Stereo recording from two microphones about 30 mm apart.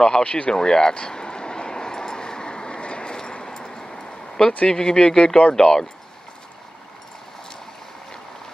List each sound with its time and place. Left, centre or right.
0.2 s speech: left
0.5 s a sound: left
4.6 s speech: left